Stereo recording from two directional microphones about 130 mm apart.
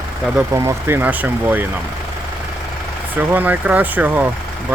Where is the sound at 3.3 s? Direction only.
15° right (ahead or behind).